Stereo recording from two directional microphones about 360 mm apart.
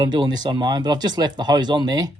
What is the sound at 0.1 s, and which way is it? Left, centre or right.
Speech, centre.